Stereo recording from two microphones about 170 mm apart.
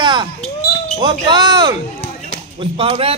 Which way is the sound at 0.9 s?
25° right (ahead or behind).